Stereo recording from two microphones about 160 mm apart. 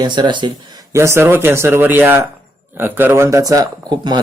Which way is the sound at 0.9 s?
15° right (ahead or behind).